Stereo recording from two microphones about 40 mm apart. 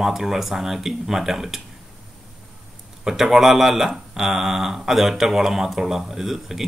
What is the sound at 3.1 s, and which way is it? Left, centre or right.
Speech, centre.